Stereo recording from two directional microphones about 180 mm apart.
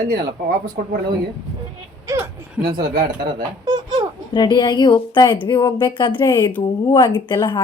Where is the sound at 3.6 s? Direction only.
20° right (ahead or behind).